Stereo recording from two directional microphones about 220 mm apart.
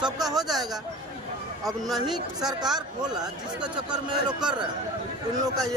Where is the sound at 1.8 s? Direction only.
Centre (ahead or behind).